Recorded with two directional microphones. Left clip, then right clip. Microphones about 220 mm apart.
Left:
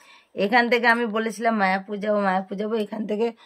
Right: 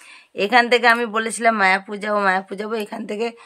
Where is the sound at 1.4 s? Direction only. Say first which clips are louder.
Right 6 dB; 35° right (ahead or behind).